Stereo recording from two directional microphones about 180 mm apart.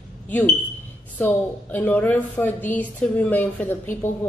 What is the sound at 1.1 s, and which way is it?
A woman's voice, 10° left (ahead or behind).